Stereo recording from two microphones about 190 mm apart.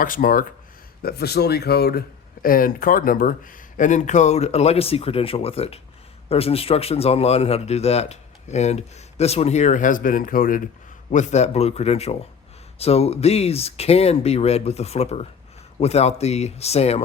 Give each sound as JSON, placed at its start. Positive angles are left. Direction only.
{"t": 0.0, "sound": "speech", "side_deg": 45}